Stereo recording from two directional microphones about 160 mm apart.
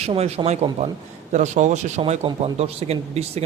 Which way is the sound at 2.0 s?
35° right (ahead or behind).